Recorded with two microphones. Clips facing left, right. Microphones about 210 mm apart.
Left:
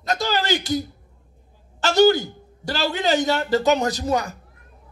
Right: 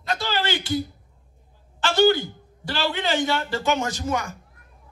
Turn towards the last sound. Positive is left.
turn(degrees=35)  # may be behind; listen again after turning